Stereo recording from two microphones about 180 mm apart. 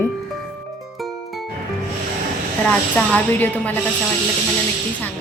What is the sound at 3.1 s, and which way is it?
Speech, 10° left (ahead or behind).